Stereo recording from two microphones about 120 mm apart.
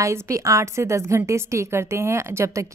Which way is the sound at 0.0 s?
25° right (ahead or behind).